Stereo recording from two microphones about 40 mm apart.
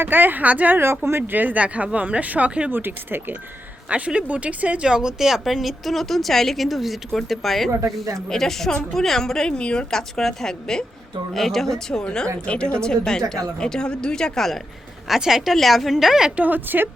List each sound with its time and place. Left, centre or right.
0.0 s speech: right
0.8 s speech: right
1.3 s speech: right
1.6 s speech: right
2.6 s speech: right
3.8 s speech: right
4.8 s speech: centre; by 9.8 s left
9.9 s speech: centre
12.0 s speech: left
15.0 s speech: centre
16.3 s speech: right
16.6 s speech: right